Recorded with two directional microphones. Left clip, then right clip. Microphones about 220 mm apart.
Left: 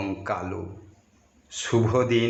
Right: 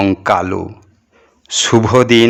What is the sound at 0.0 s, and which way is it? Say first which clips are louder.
Speech: right 16 dB; 40° right (ahead or behind).